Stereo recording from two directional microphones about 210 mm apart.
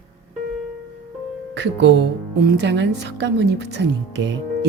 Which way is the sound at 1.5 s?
55° right (ahead or behind).